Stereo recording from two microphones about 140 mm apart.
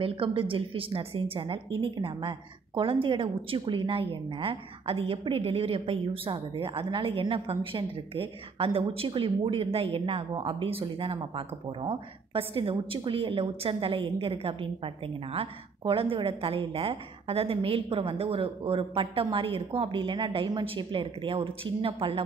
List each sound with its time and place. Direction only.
0.0 s a woman's voice: 40° right (ahead or behind)